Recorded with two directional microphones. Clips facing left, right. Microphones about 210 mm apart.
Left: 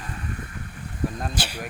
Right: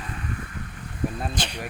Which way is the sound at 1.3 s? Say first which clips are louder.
Even; 5° left (ahead or behind).